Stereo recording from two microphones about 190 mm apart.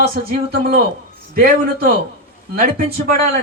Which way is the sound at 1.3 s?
50° right (ahead or behind).